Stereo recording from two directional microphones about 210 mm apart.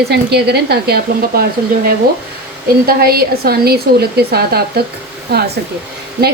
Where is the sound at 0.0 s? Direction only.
50° right (ahead or behind).